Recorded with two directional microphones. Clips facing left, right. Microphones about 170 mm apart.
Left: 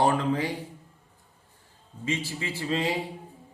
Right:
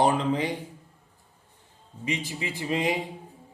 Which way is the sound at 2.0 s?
20° right (ahead or behind).